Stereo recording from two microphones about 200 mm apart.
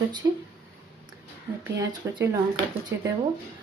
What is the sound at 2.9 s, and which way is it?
Speech, 65° right (ahead or behind).